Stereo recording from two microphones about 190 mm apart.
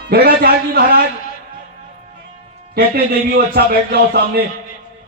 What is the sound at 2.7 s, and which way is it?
A man's voice, 55° right (ahead or behind).